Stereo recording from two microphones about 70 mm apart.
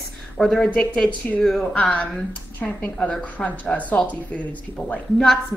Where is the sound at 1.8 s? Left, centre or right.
Centre.